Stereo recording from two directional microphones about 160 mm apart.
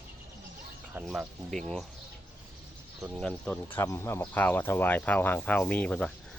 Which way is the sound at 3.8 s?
15° left (ahead or behind).